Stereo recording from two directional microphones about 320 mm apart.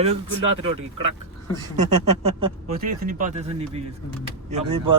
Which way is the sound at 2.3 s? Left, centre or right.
Centre.